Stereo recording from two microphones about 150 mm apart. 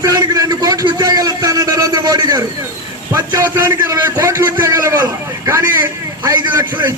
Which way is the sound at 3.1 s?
25° right (ahead or behind).